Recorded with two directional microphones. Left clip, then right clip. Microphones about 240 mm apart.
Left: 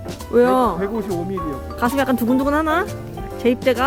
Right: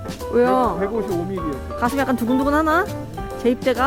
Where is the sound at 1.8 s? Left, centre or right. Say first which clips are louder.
Left 2 dB; centre.